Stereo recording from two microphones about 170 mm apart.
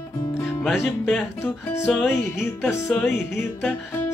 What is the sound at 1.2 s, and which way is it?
Music, 15° left (ahead or behind).